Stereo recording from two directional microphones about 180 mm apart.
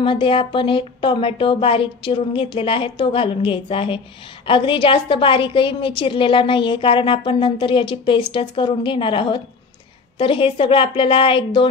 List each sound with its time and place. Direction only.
0.0 s a woman's voice: 30° left (ahead or behind)